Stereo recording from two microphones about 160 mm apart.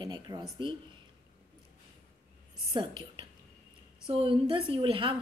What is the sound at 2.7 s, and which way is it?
A woman's voice, 30° right (ahead or behind).